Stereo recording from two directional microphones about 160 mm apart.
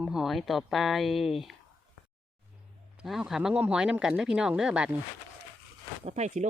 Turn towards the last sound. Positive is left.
turn(degrees=-45)  # may be behind; listen again after turning